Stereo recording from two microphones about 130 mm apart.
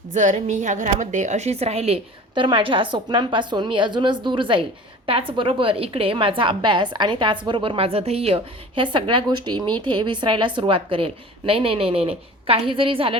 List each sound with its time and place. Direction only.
0.1 s a woman's voice: 65° right (ahead or behind); by 13.1 s 45° right (ahead or behind)